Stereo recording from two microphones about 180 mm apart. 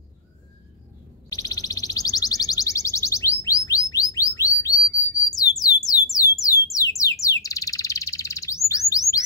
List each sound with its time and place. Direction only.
1.3 s music: 20° left (ahead or behind)